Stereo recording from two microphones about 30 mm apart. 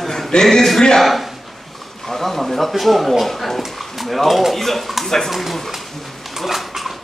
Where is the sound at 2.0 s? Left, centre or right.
Centre.